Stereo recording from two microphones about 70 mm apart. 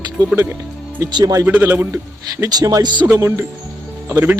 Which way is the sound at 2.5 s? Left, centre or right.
Right.